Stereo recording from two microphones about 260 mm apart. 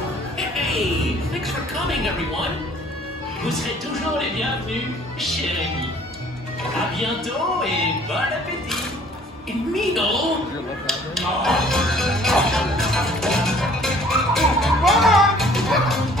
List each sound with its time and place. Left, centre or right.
0.6 s music: centre
3.4 s speech: centre
6.7 s speech: centre
9.8 s speech: centre
10.9 s music: centre